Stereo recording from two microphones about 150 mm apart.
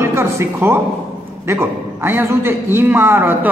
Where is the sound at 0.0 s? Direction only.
20° right (ahead or behind).